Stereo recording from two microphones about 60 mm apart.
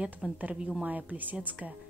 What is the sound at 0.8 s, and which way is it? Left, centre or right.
Speech, right.